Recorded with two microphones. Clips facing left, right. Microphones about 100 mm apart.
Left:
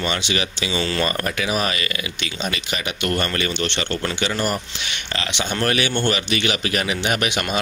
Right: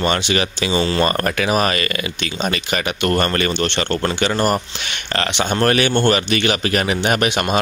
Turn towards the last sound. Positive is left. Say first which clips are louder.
# right 4 dB
turn(degrees=-40)  # may be behind; listen again after turning